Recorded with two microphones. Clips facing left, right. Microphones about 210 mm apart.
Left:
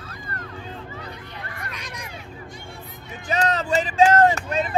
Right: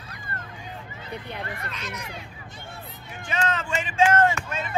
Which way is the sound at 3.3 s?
35° left (ahead or behind).